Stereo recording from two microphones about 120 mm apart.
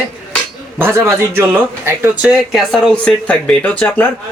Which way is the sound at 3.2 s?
10° left (ahead or behind).